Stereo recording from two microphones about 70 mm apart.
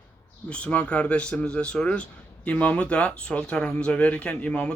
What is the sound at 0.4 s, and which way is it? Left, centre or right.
Speech, centre.